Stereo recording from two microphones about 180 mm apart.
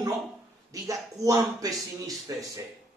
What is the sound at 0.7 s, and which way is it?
Speech, 20° right (ahead or behind).